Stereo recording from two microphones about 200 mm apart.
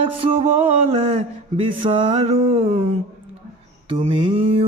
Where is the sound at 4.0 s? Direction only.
25° right (ahead or behind).